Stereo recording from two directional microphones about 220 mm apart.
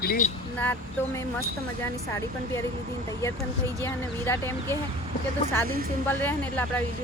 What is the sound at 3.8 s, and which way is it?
Speech, 10° left (ahead or behind).